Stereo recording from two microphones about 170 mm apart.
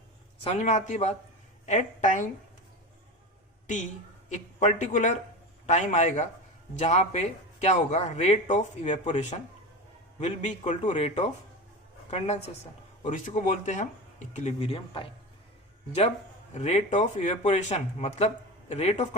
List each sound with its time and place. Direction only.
0.4 s a man's voice: 40° left (ahead or behind)
4.3 s a man's voice: 45° left (ahead or behind)
13.0 s a man's voice: 50° left (ahead or behind)
16.6 s a man's voice: 40° left (ahead or behind)